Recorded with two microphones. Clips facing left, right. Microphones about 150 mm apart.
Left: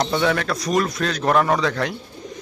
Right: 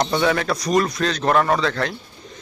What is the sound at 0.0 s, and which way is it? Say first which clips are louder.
A man's voice: right 1 dB; centre (ahead or behind).